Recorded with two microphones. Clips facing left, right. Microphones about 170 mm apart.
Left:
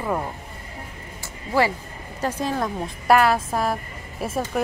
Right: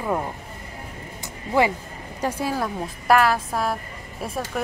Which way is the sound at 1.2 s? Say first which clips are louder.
Right 1 dB; 20° right (ahead or behind).